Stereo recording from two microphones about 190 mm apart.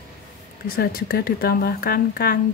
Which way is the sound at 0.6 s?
50° left (ahead or behind).